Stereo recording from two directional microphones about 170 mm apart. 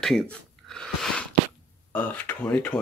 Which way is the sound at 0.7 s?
5° left (ahead or behind).